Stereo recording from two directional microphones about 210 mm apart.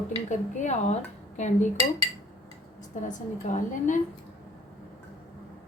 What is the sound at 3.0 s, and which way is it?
Speech, 35° left (ahead or behind).